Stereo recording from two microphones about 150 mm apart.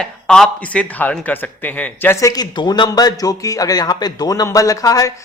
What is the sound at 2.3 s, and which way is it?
A man's voice, 25° left (ahead or behind).